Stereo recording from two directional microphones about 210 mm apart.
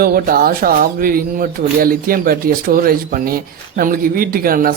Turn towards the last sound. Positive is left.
turn(degrees=-45)  # may be behind; listen again after turning